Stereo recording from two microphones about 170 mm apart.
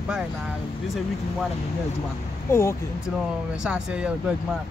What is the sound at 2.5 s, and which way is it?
Speech, 15° left (ahead or behind).